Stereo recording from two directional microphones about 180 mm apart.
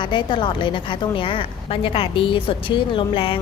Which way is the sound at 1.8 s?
30° left (ahead or behind).